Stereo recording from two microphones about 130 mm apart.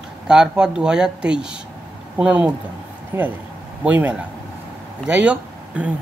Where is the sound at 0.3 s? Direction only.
5° right (ahead or behind).